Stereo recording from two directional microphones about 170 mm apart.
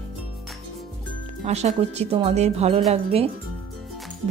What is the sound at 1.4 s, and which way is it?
Speech, 40° right (ahead or behind).